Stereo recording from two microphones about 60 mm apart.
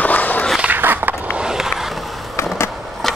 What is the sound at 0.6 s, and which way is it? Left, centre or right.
Skateboard, right.